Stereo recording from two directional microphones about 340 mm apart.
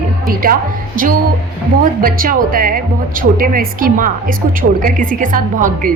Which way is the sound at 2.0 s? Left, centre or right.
Right.